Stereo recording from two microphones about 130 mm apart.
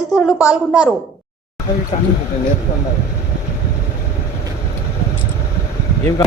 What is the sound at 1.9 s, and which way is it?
Speech, 50° left (ahead or behind).